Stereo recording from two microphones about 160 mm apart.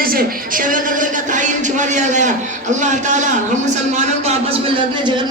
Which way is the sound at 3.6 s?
45° right (ahead or behind).